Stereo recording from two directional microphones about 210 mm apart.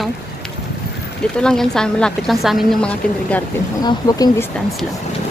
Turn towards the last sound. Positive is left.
turn(degrees=15)  # may be behind; listen again after turning